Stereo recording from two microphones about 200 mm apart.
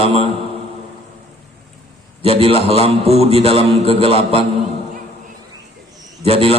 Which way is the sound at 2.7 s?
30° right (ahead or behind).